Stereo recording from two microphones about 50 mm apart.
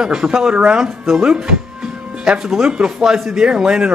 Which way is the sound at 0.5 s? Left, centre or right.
Right.